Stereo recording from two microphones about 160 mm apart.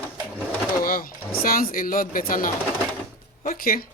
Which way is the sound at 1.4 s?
65° left (ahead or behind).